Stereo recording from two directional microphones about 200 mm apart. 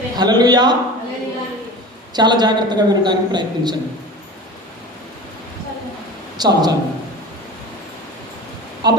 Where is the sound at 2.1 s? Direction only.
20° right (ahead or behind).